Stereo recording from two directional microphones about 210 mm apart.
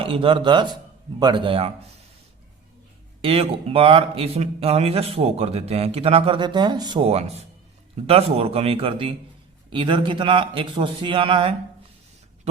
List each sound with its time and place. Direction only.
0.0 s speech: 25° right (ahead or behind)
3.2 s speech: 25° right (ahead or behind)